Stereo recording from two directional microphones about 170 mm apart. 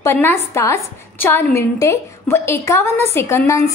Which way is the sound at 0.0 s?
15° left (ahead or behind).